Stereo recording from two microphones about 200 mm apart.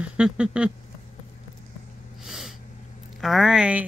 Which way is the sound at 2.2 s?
Centre (ahead or behind).